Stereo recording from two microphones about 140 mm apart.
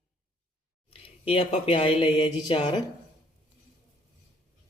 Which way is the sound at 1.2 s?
40° left (ahead or behind).